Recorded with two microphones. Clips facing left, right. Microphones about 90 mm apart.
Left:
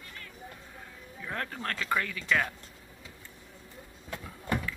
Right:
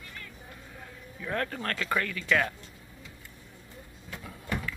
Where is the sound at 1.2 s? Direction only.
10° left (ahead or behind).